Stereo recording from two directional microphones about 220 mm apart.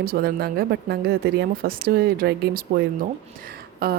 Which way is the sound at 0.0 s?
45° right (ahead or behind).